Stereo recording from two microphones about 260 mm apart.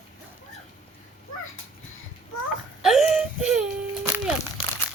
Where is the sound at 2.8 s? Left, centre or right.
Centre.